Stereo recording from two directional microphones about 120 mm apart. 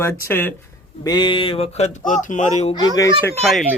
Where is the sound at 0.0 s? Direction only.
20° left (ahead or behind).